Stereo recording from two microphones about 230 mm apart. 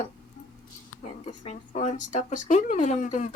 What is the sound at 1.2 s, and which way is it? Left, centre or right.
Speech, left.